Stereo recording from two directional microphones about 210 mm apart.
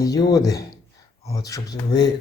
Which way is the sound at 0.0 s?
15° left (ahead or behind).